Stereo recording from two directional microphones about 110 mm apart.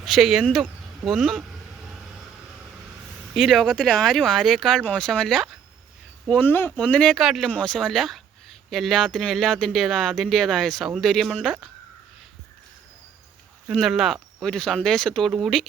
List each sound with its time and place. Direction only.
0.0 s speech: centre (ahead or behind)
3.3 s speech: centre (ahead or behind)
6.2 s speech: 15° left (ahead or behind)
13.7 s speech: centre (ahead or behind)